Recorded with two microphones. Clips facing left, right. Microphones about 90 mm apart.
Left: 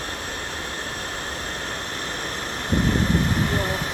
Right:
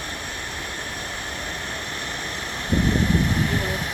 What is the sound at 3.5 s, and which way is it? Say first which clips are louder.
Vehicle: left 1 dB; 35° left (ahead or behind).